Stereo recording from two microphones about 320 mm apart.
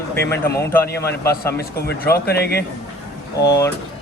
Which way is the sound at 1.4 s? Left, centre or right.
Left.